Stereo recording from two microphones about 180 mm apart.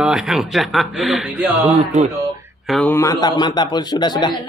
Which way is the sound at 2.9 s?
20° left (ahead or behind).